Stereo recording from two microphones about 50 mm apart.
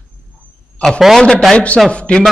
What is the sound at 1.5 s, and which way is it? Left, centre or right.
Speech, left.